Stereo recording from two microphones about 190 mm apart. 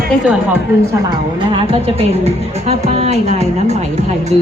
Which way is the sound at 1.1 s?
30° right (ahead or behind).